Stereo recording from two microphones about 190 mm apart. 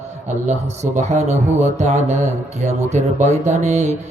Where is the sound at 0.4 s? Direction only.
35° right (ahead or behind).